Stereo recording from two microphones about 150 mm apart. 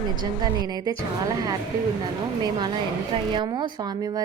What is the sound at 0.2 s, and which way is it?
Speech, 30° right (ahead or behind).